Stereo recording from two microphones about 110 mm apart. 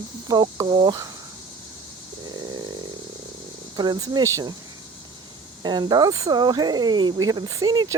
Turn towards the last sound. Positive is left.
turn(degrees=-35)  # may be behind; listen again after turning